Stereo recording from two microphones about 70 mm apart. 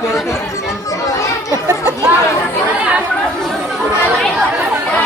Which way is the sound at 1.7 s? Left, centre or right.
Right.